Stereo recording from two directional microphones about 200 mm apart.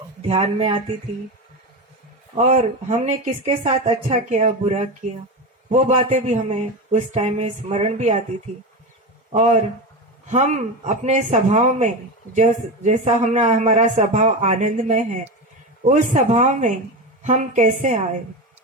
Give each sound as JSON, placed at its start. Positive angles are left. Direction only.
{"t": 0.3, "sound": "speech", "side_deg": -30}
{"t": 2.3, "sound": "speech", "side_deg": -35}
{"t": 9.3, "sound": "speech", "side_deg": -35}